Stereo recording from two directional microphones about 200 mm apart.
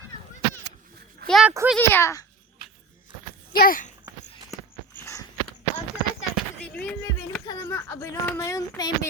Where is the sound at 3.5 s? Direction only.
45° left (ahead or behind).